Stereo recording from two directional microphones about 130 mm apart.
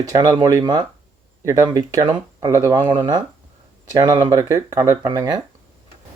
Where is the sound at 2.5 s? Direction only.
20° right (ahead or behind).